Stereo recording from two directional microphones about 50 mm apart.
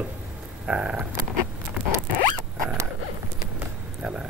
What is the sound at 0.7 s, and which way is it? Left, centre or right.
Speech, right.